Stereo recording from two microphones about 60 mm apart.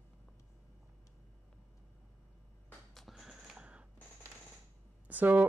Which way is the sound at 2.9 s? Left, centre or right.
Centre.